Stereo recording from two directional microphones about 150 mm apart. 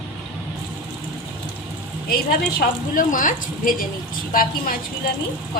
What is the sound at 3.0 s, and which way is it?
Speech, 65° left (ahead or behind).